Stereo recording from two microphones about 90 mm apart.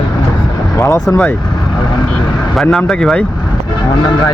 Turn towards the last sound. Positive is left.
turn(degrees=5)  # may be behind; listen again after turning